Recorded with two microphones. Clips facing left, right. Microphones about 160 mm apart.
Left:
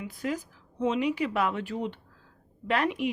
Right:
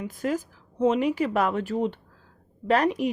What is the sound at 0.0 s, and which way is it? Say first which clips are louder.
Speech: right 4 dB; 45° right (ahead or behind).